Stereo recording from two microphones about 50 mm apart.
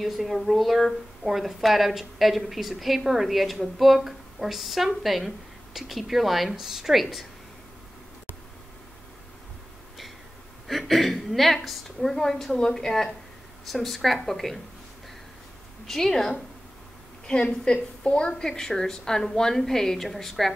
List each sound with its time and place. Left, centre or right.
0.0 s a woman's voice: centre
10.7 s a woman's voice: centre
15.9 s a woman's voice: centre